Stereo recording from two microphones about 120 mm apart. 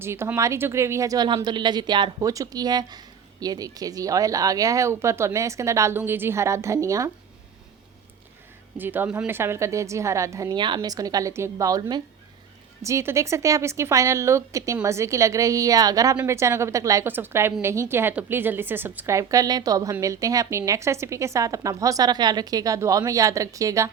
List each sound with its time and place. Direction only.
0.0 s a woman's voice: 20° right (ahead or behind)
8.8 s a woman's voice: 15° right (ahead or behind)
10.5 s a woman's voice: 40° right (ahead or behind)
12.8 s a woman's voice: 25° right (ahead or behind)